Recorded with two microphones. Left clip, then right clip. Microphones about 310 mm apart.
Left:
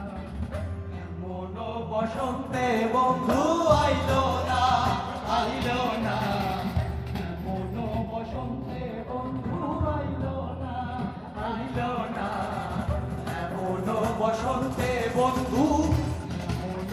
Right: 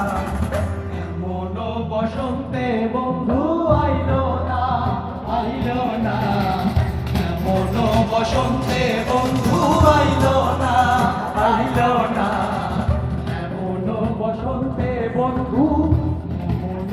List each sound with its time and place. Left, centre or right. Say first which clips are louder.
2.0 s music: right 3 dB; left
3.2 s music: right 3 dB; left; by 6.6 s centre
7.2 s music: right 14 dB; centre; by 10.3 s right
10.6 s music: right 18 dB; right; by 12.5 s centre
14.8 s music: right 4 dB; left